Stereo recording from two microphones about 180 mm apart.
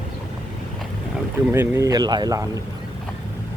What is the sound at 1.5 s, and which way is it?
Speech, 15° right (ahead or behind).